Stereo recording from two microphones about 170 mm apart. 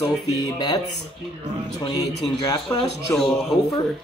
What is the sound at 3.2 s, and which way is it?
Speech, centre (ahead or behind).